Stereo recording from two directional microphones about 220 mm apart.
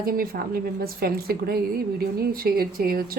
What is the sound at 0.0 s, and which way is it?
Speech, 40° right (ahead or behind).